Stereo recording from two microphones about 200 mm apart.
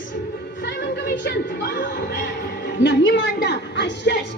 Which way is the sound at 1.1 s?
55° left (ahead or behind).